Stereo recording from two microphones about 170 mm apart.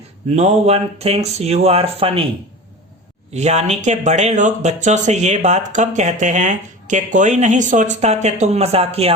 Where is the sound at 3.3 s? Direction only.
40° right (ahead or behind).